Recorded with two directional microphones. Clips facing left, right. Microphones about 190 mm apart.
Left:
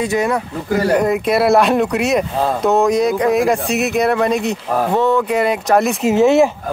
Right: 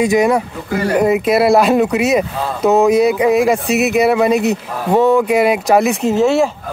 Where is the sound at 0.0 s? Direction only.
15° right (ahead or behind).